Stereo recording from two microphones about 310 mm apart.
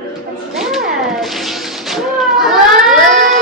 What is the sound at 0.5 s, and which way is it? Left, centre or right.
Cat, centre.